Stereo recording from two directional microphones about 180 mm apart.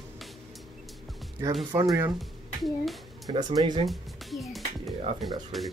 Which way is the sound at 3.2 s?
25° right (ahead or behind).